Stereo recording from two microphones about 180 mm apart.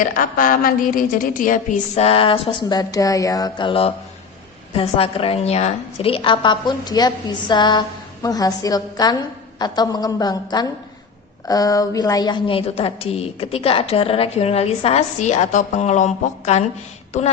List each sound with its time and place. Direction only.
0.0 s a woman's voice: 50° left (ahead or behind)
2.0 s a woman's voice: 30° left (ahead or behind)